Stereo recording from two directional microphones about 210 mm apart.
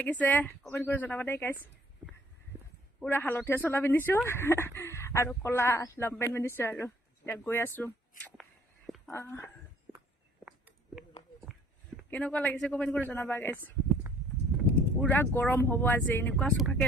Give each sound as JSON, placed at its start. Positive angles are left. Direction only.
{"t": 0.0, "sound": "speech", "side_deg": 10}
{"t": 2.5, "sound": "a sound", "side_deg": -10}
{"t": 3.0, "sound": "speech", "side_deg": 10}
{"t": 9.1, "sound": "speech", "side_deg": 10}
{"t": 9.9, "sound": "a sound", "side_deg": -10}
{"t": 12.1, "sound": "speech", "side_deg": 5}
{"t": 15.0, "sound": "speech", "side_deg": 10}